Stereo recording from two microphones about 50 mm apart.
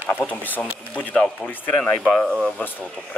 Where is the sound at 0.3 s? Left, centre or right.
Left.